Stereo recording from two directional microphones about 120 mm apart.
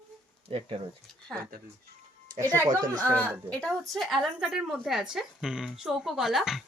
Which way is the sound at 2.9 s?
20° right (ahead or behind).